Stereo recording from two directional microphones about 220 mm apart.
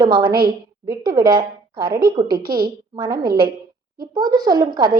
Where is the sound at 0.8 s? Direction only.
20° right (ahead or behind).